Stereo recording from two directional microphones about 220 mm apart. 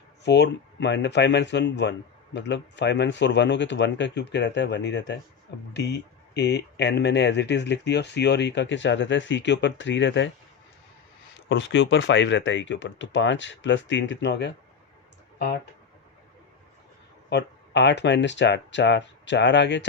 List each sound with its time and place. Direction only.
0.3 s speech: 50° left (ahead or behind)
11.4 s speech: 55° left (ahead or behind)
17.2 s speech: 50° left (ahead or behind)